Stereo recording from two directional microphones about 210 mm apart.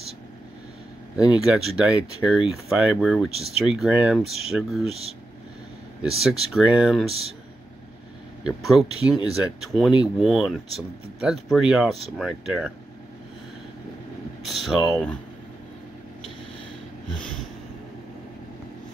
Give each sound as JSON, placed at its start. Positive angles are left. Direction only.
{"t": 1.1, "sound": "speech", "side_deg": -5}
{"t": 6.5, "sound": "speech", "side_deg": -5}
{"t": 8.5, "sound": "speech", "side_deg": 0}
{"t": 14.4, "sound": "speech", "side_deg": 0}